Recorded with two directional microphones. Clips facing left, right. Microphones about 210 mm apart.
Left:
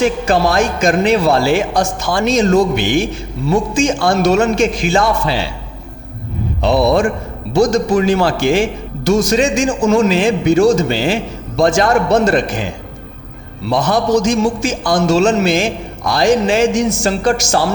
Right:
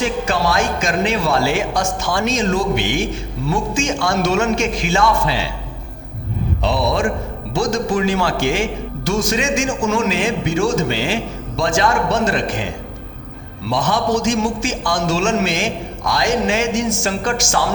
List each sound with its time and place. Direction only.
0.3 s a man's voice: 35° left (ahead or behind)
7.5 s a man's voice: 40° left (ahead or behind)
13.7 s a man's voice: 40° left (ahead or behind)